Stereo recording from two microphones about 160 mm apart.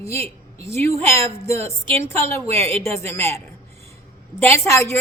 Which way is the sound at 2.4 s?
40° right (ahead or behind).